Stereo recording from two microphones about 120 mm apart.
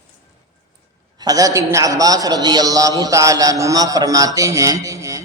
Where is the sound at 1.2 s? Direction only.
30° right (ahead or behind).